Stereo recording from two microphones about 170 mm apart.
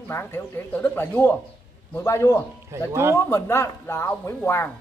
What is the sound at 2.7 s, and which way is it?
Speech, 15° right (ahead or behind).